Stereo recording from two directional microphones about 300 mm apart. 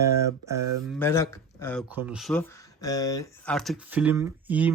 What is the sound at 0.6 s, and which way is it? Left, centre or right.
Speech, right.